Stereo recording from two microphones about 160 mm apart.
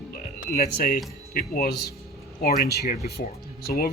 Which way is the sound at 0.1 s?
75° left (ahead or behind).